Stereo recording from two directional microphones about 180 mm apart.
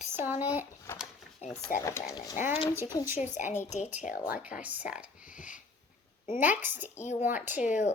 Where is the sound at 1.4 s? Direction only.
40° left (ahead or behind).